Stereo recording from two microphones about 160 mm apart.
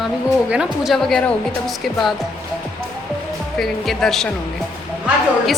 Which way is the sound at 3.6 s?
Centre (ahead or behind).